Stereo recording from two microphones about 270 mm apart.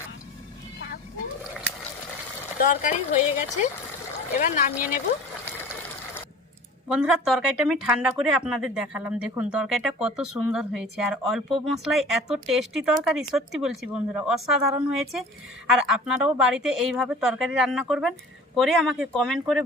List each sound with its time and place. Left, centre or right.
2.6 s speech: left
6.8 s speech: centre
15.7 s speech: centre